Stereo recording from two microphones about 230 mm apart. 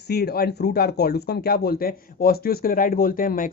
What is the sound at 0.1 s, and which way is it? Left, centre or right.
Speech, left.